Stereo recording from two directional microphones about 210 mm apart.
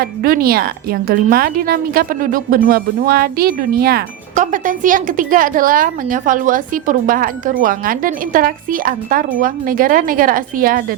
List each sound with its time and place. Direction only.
0.0 s a woman's voice: 45° right (ahead or behind)